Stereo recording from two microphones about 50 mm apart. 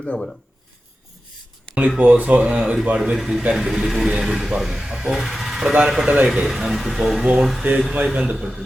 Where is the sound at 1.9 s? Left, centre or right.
Right.